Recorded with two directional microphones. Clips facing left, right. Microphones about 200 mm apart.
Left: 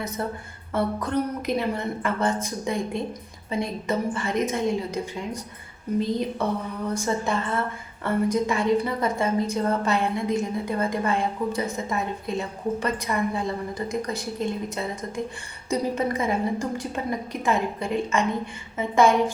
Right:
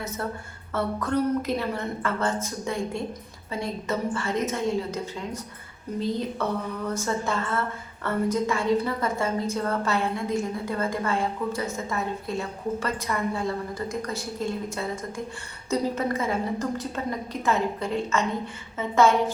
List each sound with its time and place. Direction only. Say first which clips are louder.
0.7 s a woman's voice: left 1 dB; 15° left (ahead or behind)
6.8 s a woman's voice: left 3 dB; 15° left (ahead or behind)
15.7 s a woman's voice: left 1 dB; 15° left (ahead or behind)